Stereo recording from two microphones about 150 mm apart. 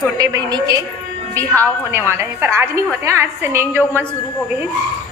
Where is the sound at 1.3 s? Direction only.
10° left (ahead or behind).